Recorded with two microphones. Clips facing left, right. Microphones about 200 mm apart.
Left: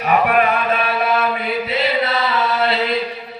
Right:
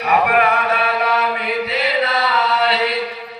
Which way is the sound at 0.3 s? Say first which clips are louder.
Even; 25° left (ahead or behind).